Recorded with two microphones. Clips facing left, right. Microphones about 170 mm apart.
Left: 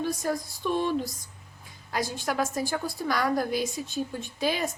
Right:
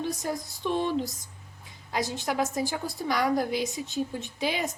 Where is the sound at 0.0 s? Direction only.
20° right (ahead or behind).